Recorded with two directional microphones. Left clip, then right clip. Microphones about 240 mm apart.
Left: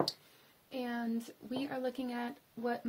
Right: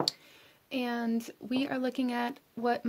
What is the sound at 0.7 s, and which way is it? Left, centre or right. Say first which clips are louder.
Speech: right 6 dB; right.